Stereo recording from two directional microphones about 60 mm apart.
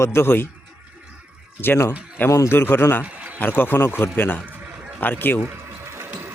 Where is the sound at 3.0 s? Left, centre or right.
Right.